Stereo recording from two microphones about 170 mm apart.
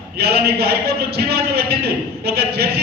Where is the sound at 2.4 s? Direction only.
70° right (ahead or behind).